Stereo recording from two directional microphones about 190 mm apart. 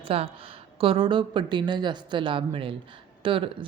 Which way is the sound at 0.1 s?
30° right (ahead or behind).